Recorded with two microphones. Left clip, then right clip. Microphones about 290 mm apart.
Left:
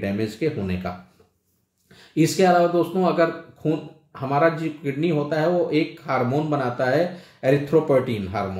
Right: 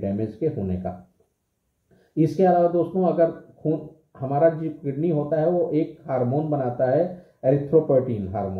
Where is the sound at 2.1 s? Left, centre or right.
Left.